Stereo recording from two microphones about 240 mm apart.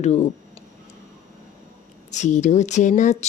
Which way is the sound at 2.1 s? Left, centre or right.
Left.